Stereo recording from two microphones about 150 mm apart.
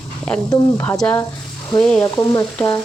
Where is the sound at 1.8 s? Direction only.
10° left (ahead or behind).